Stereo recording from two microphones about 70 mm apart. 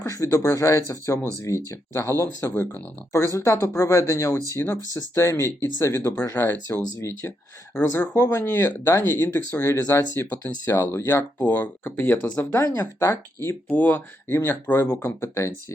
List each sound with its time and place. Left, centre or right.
0.0 s speech: left
8.9 s speech: left
10.2 s speech: left
10.8 s speech: left
12.6 s speech: left
13.0 s speech: left
13.7 s speech: left